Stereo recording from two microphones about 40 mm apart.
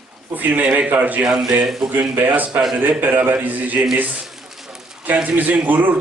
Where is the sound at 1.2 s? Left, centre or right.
Centre.